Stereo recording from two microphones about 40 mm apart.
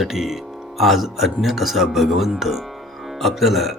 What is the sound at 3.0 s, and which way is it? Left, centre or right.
Music, centre.